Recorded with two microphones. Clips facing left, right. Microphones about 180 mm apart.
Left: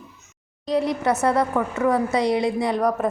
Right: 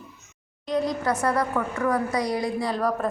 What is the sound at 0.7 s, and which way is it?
A woman's voice, 25° left (ahead or behind).